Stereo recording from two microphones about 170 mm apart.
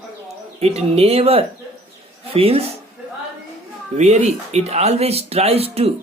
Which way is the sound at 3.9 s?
40° right (ahead or behind).